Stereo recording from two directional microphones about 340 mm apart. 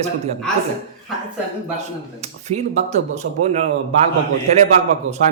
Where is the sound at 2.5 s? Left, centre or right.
Centre.